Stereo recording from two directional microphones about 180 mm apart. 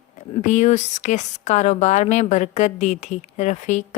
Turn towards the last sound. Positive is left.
turn(degrees=40)  # may be behind; listen again after turning